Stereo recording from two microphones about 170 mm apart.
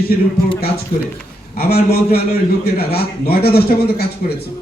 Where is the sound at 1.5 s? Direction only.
65° left (ahead or behind).